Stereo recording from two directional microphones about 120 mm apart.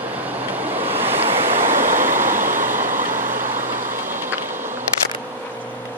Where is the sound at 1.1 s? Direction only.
50° right (ahead or behind).